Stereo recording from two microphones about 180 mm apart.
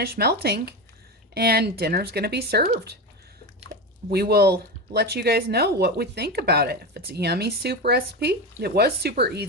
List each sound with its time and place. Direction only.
0.0 s speech: 60° right (ahead or behind)
4.1 s speech: 60° right (ahead or behind)